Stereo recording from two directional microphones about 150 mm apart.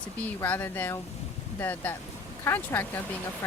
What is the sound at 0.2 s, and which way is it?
Speech, 10° left (ahead or behind).